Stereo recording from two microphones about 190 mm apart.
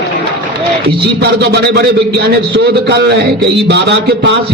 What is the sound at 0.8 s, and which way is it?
A man's voice, 60° right (ahead or behind).